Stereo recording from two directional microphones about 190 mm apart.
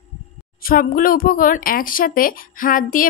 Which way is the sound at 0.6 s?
50° left (ahead or behind).